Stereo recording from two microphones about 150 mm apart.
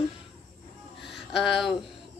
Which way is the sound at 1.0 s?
Centre (ahead or behind).